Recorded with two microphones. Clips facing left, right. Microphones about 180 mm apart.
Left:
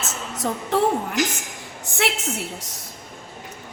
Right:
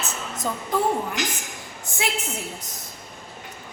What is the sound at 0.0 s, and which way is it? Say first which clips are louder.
Music: left 2 dB; 90° left.